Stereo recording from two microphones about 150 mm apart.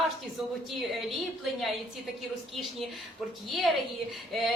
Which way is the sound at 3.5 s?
Centre (ahead or behind).